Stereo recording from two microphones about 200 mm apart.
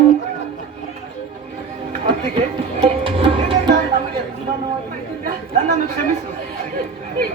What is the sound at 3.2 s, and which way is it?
Music, 25° right (ahead or behind).